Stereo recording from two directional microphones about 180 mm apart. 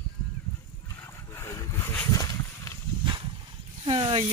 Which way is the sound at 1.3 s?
15° left (ahead or behind).